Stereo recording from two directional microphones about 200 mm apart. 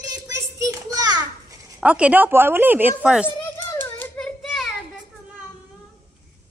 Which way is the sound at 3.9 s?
10° left (ahead or behind).